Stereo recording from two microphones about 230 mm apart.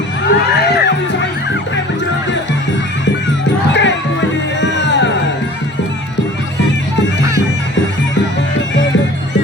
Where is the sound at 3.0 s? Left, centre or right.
Left.